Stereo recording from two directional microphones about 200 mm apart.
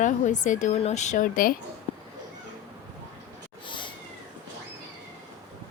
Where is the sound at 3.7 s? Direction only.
25° left (ahead or behind).